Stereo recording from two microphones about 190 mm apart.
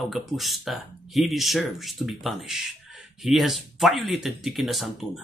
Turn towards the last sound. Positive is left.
turn(degrees=0)  # may be behind; listen again after turning